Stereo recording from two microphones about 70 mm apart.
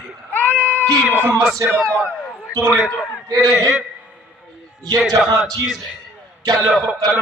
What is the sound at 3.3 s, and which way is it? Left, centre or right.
Speech, right.